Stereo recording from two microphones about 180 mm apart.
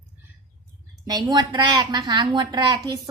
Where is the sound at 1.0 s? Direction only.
20° right (ahead or behind).